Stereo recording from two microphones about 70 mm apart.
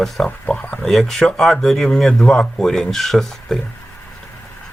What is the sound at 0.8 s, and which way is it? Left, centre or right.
Speech, centre.